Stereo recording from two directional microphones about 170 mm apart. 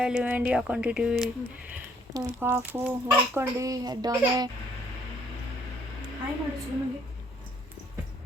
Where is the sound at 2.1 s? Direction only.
15° right (ahead or behind).